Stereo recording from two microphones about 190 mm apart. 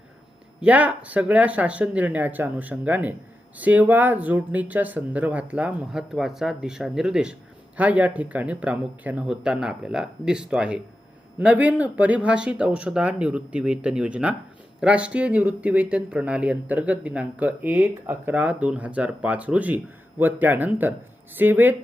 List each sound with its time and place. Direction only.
0.6 s speech: 10° right (ahead or behind)